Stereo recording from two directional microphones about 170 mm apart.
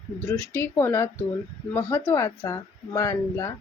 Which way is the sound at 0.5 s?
15° left (ahead or behind).